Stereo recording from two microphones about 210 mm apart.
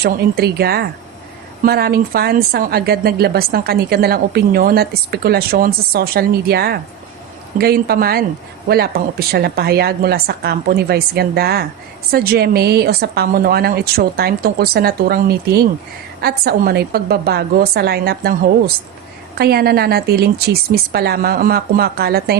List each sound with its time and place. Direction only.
0.0 s a woman's voice: 50° right (ahead or behind)